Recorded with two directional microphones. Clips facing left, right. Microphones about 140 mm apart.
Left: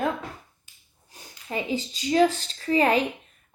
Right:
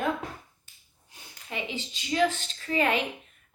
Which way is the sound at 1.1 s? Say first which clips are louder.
Left 6 dB; 40° left (ahead or behind).